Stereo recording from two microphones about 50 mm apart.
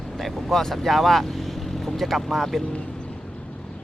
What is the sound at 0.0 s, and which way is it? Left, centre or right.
Speech, centre.